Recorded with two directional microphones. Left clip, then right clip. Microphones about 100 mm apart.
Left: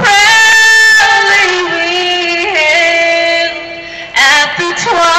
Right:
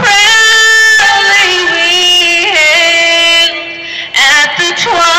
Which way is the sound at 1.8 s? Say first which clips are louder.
Right 5 dB; 25° right (ahead or behind).